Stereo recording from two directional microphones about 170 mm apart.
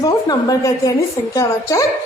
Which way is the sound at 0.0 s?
20° left (ahead or behind).